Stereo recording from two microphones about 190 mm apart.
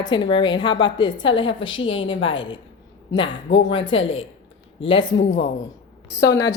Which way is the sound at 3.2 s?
75° left (ahead or behind).